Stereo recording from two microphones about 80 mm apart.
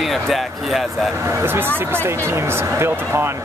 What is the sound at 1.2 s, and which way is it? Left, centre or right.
Speech, right.